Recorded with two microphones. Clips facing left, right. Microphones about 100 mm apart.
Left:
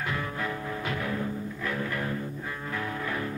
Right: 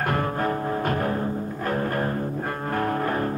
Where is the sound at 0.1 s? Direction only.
50° right (ahead or behind).